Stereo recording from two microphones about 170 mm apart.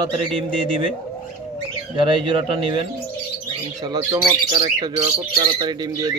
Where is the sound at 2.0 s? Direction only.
30° right (ahead or behind).